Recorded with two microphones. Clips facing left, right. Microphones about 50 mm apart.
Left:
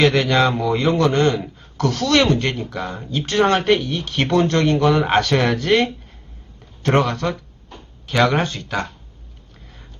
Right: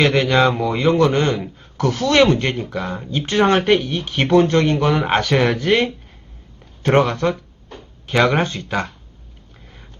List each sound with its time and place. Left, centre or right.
0.0 s speech: centre
0.6 s speech: centre
0.9 s speech: centre
6.8 s speech: centre